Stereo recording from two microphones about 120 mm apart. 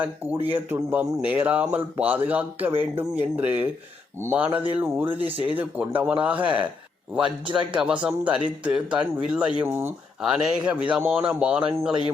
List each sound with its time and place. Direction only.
0.5 s speech: 15° right (ahead or behind)
9.6 s speech: 20° right (ahead or behind)
10.2 s speech: 5° right (ahead or behind)